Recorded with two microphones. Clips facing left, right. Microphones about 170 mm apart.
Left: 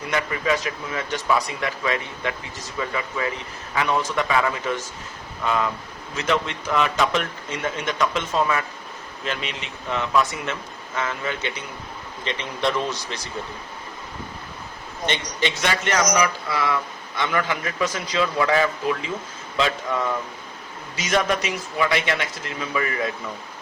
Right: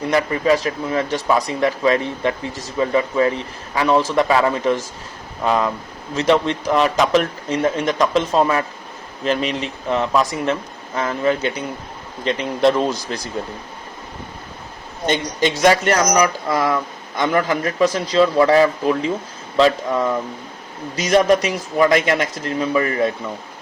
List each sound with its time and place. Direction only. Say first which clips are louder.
0.1 s speech: right 6 dB; 35° right (ahead or behind)
6.1 s speech: right 7 dB; 35° right (ahead or behind)
15.0 s speech: right 6 dB; 40° right (ahead or behind)